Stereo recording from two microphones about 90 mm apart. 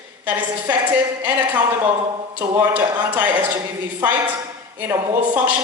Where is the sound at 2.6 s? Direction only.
20° right (ahead or behind).